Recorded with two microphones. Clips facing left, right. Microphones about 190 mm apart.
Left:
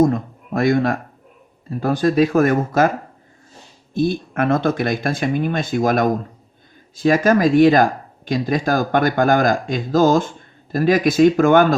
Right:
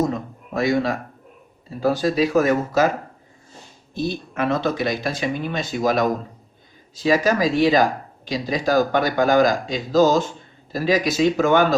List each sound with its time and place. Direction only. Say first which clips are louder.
0.0 s speech: left 6 dB; 50° left (ahead or behind)
3.9 s speech: left 6 dB; 50° left (ahead or behind)